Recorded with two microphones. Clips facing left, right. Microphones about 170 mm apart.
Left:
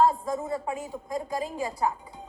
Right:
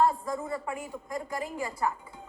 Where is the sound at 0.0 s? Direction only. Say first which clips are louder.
Left 3 dB; 20° left (ahead or behind).